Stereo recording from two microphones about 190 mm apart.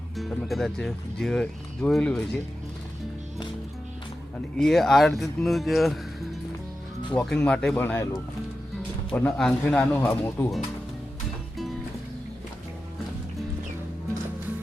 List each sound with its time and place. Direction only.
0.2 s speech: centre (ahead or behind)
4.5 s speech: centre (ahead or behind)
7.1 s speech: 5° left (ahead or behind)